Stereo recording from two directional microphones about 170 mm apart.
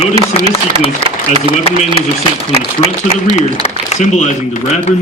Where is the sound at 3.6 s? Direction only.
45° left (ahead or behind).